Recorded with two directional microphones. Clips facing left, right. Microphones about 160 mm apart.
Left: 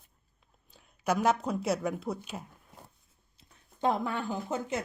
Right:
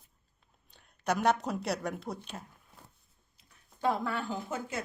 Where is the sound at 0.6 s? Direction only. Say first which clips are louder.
Left 2 dB; 5° left (ahead or behind).